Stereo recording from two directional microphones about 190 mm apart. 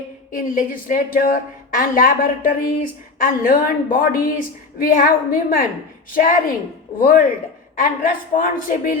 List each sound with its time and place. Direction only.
0.3 s a woman's voice: 45° left (ahead or behind)